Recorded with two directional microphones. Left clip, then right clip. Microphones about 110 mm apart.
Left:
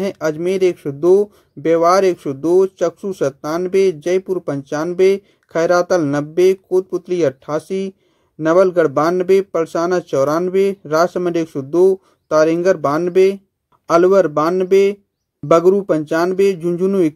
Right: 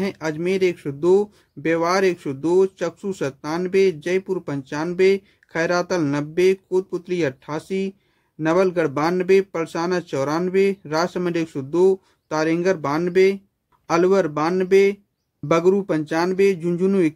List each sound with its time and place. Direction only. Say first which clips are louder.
0.0 s speech: left 6 dB; 20° left (ahead or behind)